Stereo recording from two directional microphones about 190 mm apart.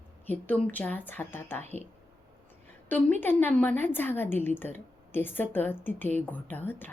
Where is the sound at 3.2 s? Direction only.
10° left (ahead or behind).